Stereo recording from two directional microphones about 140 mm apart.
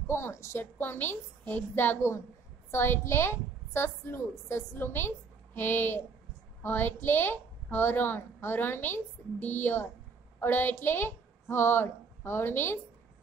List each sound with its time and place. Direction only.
0.0 s a woman's voice: 20° left (ahead or behind)